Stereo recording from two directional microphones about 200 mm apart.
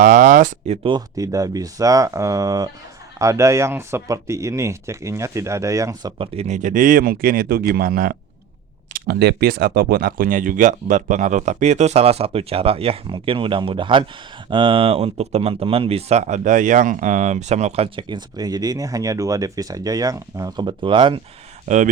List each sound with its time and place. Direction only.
0.0 s speech: 40° right (ahead or behind)
0.8 s speech: 25° right (ahead or behind)